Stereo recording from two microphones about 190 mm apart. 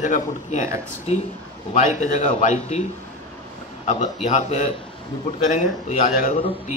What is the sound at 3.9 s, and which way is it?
Speech, 35° left (ahead or behind).